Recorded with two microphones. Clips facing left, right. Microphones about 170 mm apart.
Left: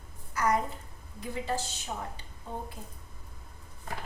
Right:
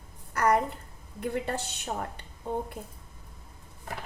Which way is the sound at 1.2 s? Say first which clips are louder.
Right 3 dB; 60° right (ahead or behind).